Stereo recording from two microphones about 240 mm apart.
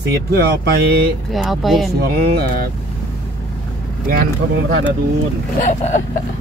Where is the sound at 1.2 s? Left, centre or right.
Centre.